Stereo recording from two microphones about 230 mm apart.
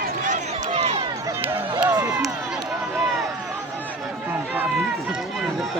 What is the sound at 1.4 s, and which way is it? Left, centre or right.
Run, centre.